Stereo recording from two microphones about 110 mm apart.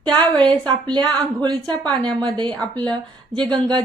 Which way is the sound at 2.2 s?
40° right (ahead or behind).